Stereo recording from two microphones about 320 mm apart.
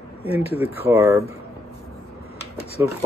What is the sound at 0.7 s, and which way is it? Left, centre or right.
Speech, centre.